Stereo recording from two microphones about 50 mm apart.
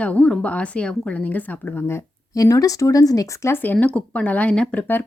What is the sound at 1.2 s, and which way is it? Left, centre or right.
Speech, left.